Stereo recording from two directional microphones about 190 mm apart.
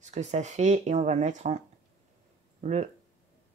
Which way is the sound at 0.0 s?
35° right (ahead or behind).